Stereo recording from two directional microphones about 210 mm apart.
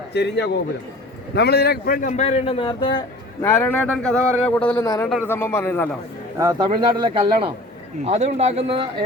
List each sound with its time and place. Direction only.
0.1 s a man's voice: 55° left (ahead or behind); by 3.0 s 25° left (ahead or behind)
3.4 s a man's voice: 10° left (ahead or behind)
5.3 s a man's voice: 10° left (ahead or behind)
6.4 s speech: 20° right (ahead or behind)